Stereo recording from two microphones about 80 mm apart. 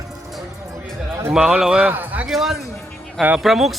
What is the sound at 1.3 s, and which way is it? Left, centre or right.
Speech, centre.